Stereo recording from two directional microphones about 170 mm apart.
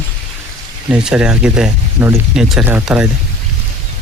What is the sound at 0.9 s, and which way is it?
Speech, 5° right (ahead or behind).